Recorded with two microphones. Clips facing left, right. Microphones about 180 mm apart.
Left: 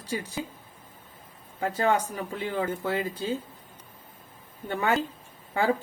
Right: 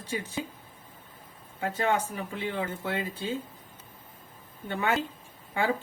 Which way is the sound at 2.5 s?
35° left (ahead or behind).